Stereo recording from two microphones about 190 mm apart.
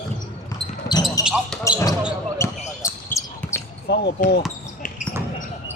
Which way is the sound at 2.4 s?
15° left (ahead or behind).